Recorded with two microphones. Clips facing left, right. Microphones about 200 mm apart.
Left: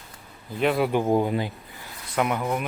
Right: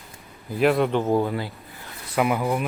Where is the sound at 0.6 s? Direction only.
Centre (ahead or behind); by 1.5 s 15° left (ahead or behind).